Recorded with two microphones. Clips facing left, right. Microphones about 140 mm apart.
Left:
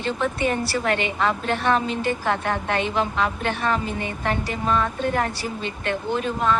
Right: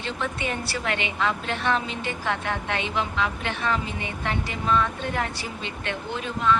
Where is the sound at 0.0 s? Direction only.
45° left (ahead or behind).